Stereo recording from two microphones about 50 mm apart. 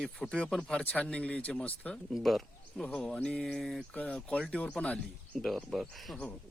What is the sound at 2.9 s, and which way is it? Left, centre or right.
Speech, left.